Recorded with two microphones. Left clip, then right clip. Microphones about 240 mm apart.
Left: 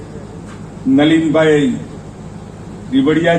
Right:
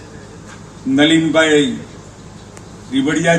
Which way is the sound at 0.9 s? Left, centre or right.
Right.